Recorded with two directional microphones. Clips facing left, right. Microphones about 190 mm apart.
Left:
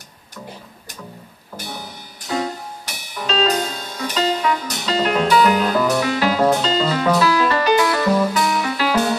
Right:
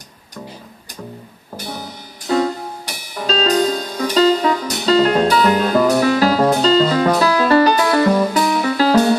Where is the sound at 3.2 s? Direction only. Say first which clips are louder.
Right 4 dB; 35° right (ahead or behind).